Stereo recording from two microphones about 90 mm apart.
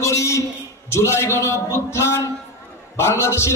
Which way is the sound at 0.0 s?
35° left (ahead or behind).